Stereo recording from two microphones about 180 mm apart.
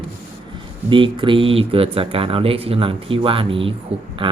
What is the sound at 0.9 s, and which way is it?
Speech, 25° right (ahead or behind).